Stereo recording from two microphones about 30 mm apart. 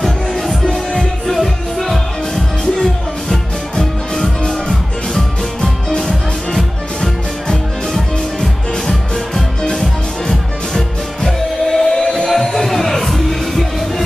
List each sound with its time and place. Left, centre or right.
0.0 s music: centre
8.4 s music: centre
11.2 s music: centre